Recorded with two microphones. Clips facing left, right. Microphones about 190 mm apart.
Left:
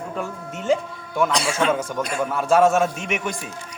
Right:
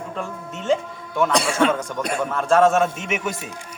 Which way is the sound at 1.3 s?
60° right (ahead or behind).